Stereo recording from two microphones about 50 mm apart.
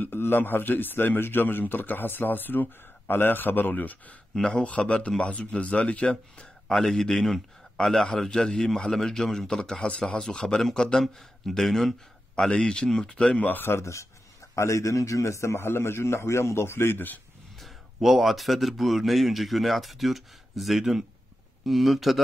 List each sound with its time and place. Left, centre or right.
0.0 s a man's voice: left
4.4 s speech: centre
6.7 s a man's voice: centre
12.4 s a man's voice: centre
13.4 s speech: left
13.7 s a man's voice: left
17.6 s speech: centre